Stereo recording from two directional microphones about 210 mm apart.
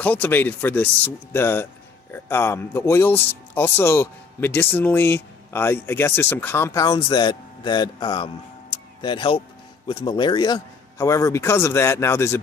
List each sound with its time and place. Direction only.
0.0 s speech: 10° left (ahead or behind)